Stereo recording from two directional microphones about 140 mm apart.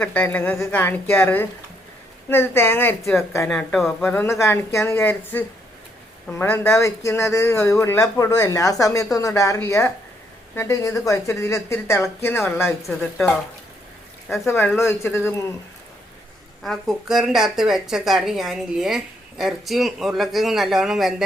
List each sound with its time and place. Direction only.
0.0 s a woman's voice: 10° left (ahead or behind)
12.9 s speech: 5° left (ahead or behind)
14.4 s speech: 15° left (ahead or behind)
16.6 s speech: centre (ahead or behind)